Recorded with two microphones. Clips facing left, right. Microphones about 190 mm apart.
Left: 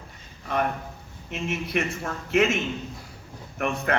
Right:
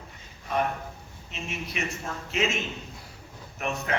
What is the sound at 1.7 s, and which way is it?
Speech, 55° left (ahead or behind).